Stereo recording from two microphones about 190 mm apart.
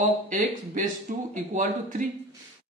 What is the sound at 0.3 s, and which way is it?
Speech, 40° right (ahead or behind).